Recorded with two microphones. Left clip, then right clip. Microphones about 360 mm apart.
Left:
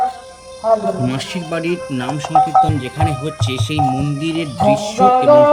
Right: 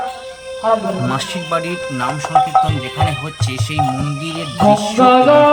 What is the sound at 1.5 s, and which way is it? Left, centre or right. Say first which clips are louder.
Speech: right 1 dB; centre.